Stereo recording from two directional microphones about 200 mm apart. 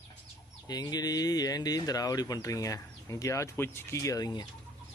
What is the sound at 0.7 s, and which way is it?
Speech, 20° left (ahead or behind).